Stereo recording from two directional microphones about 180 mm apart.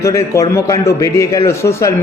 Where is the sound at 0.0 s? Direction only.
15° left (ahead or behind).